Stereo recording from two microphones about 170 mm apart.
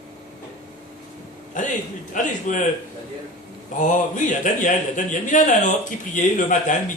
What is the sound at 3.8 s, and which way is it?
A man's voice, 50° left (ahead or behind).